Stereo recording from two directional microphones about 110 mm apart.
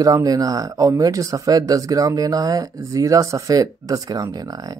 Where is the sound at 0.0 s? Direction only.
35° right (ahead or behind).